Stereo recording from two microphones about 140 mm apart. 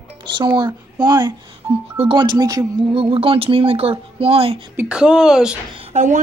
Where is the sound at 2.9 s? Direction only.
40° right (ahead or behind).